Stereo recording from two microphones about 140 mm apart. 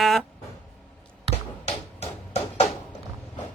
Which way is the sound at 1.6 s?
50° left (ahead or behind).